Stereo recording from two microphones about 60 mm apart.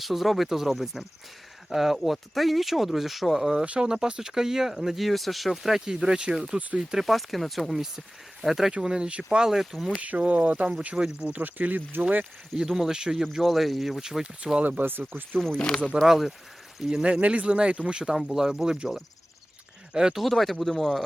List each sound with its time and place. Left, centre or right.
0.0 s speech: centre
10.0 s speech: right
10.8 s speech: centre
11.3 s speech: right
12.5 s speech: centre
14.8 s speech: right
15.4 s speech: centre
16.0 s speech: centre
17.0 s speech: centre
18.1 s speech: centre
19.9 s speech: centre
20.2 s speech: centre